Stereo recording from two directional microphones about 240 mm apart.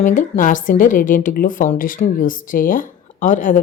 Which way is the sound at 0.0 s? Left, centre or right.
Left.